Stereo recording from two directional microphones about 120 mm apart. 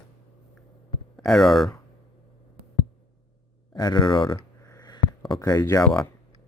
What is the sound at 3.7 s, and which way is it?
Speech, 35° left (ahead or behind).